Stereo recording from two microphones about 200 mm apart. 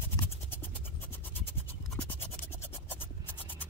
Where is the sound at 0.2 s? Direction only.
10° left (ahead or behind).